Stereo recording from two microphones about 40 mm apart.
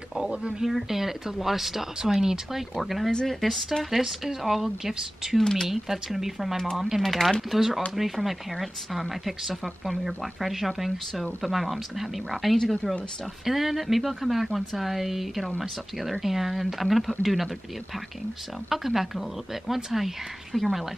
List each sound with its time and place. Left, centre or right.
0.5 s speech: centre
2.8 s speech: centre
5.4 s speech: centre
5.7 s speech: centre
7.1 s speech: centre
7.5 s speech: centre
18.7 s speech: centre